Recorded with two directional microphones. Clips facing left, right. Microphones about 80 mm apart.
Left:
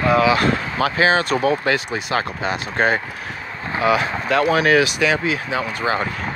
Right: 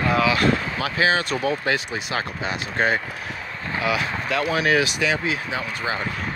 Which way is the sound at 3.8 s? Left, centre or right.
Left.